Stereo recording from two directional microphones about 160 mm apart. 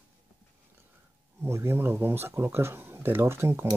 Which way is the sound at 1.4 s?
15° right (ahead or behind).